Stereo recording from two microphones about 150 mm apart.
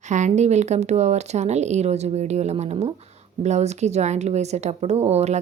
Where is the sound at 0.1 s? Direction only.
50° right (ahead or behind).